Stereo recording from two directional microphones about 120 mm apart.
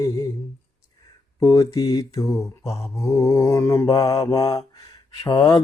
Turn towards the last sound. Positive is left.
turn(degrees=35)  # may be behind; listen again after turning